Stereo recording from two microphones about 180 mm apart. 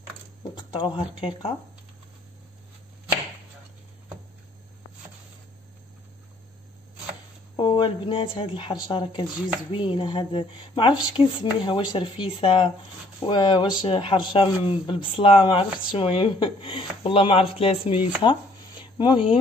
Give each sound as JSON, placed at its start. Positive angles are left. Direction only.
{"t": 0.6, "sound": "speech", "side_deg": 25}
{"t": 7.5, "sound": "speech", "side_deg": 25}
{"t": 18.2, "sound": "a sound", "side_deg": 25}